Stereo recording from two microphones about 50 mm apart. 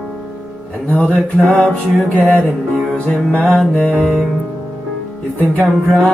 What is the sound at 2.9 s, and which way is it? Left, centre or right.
Music, centre.